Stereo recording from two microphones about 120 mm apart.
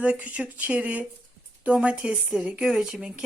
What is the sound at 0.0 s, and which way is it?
A woman's voice, 10° right (ahead or behind).